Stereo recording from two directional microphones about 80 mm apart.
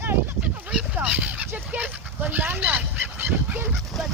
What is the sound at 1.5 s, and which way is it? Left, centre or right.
Speech, centre.